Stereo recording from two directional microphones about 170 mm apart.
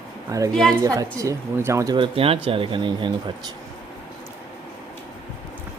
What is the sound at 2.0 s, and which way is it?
Speech, 35° right (ahead or behind).